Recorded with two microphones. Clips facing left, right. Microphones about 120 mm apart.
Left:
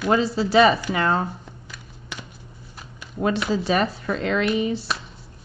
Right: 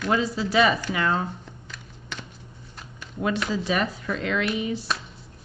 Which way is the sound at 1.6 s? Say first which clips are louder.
Right 1 dB; 10° left (ahead or behind).